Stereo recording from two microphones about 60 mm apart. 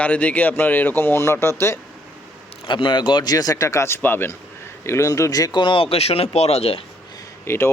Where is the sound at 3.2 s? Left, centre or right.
Left.